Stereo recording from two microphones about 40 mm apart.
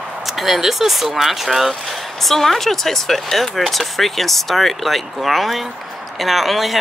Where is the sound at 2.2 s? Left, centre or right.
Centre.